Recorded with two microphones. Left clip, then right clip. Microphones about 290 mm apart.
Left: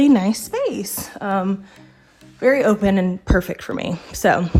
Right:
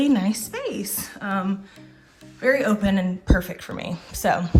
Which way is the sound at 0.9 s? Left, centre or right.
Centre.